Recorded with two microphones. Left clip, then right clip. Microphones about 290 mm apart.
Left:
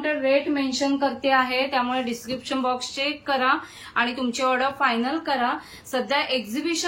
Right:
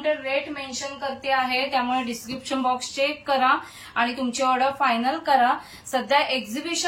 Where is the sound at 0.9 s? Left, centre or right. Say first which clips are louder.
Left 2 dB; centre.